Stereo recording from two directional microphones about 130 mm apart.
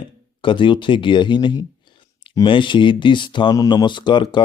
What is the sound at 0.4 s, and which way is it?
Speech, 40° left (ahead or behind).